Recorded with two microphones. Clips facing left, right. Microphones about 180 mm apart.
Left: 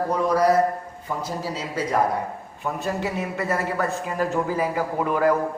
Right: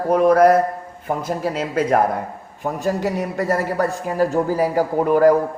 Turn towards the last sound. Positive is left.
turn(degrees=-40)  # may be behind; listen again after turning